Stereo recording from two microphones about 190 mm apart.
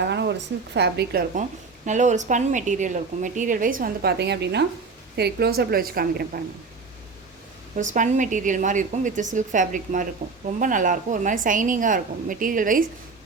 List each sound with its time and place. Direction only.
0.0 s a woman's voice: 65° right (ahead or behind)
1.4 s a woman's voice: 40° right (ahead or behind)
7.9 s a woman's voice: 40° right (ahead or behind)